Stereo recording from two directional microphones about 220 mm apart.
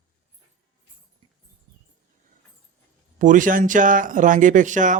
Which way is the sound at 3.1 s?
35° right (ahead or behind).